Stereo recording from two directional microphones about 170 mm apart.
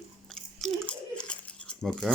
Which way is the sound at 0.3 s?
Centre (ahead or behind).